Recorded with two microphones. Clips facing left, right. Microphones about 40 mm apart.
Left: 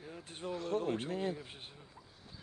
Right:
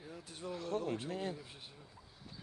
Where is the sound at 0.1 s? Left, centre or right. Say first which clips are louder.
Left 2 dB; left.